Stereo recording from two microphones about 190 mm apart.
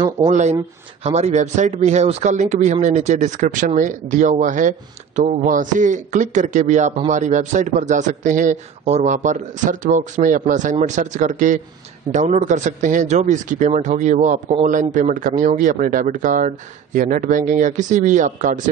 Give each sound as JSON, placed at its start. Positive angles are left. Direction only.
{"t": 0.3, "sound": "speech", "side_deg": -40}